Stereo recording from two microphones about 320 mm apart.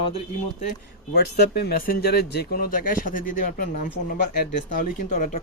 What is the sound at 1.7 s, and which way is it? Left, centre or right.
Speech, left.